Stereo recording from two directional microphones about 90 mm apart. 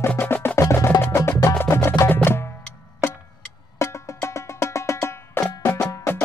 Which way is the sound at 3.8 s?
35° left (ahead or behind).